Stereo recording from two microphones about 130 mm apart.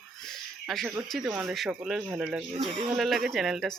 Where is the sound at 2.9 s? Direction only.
Centre (ahead or behind).